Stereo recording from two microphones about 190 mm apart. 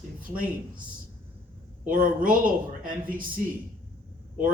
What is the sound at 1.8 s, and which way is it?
A man's voice, 45° right (ahead or behind).